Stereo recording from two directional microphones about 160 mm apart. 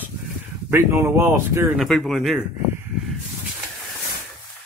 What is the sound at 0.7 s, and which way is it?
Speech, 15° right (ahead or behind).